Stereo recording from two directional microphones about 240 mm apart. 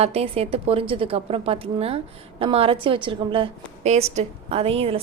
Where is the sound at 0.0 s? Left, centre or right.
Right.